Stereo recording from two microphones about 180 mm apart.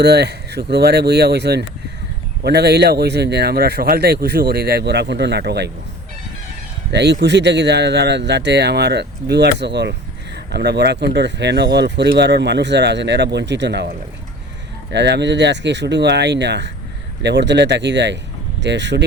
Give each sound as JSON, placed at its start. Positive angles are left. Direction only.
{"t": 0.0, "sound": "speech", "side_deg": -65}
{"t": 6.9, "sound": "speech", "side_deg": -70}
{"t": 14.9, "sound": "speech", "side_deg": -70}